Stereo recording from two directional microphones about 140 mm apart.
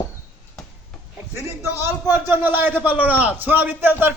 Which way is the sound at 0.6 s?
5° left (ahead or behind).